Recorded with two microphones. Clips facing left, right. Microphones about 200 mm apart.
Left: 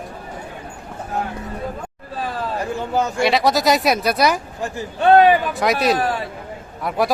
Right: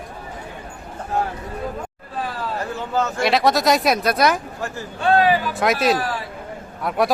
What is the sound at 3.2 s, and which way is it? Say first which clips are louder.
A man's voice: even; centre (ahead or behind).